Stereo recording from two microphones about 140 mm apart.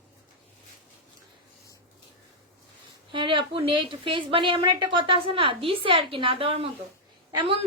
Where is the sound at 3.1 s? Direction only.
35° right (ahead or behind).